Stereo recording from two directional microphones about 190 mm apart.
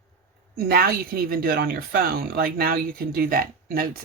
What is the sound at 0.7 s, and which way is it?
Speech, 55° right (ahead or behind).